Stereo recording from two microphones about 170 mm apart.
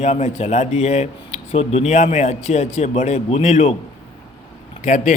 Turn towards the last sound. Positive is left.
turn(degrees=45)  # may be behind; listen again after turning